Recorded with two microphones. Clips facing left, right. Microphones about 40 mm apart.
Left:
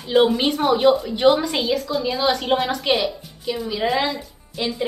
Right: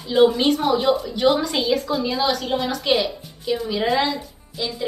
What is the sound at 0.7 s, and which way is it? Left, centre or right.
Speech, left.